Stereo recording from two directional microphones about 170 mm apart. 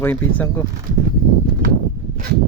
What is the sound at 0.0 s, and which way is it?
Speech, 10° left (ahead or behind).